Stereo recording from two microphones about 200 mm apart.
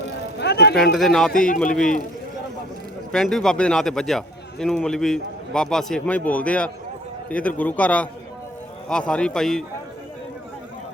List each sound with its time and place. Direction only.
0.3 s a sound: 60° left (ahead or behind)
0.9 s a man's voice: centre (ahead or behind)
1.3 s a man's voice: 40° left (ahead or behind)
1.5 s a man's voice: 5° left (ahead or behind)
3.1 s a man's voice: 5° left (ahead or behind)